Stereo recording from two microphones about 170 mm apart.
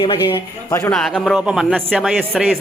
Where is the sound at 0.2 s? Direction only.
15° left (ahead or behind).